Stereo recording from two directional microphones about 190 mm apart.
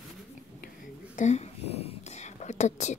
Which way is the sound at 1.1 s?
35° left (ahead or behind).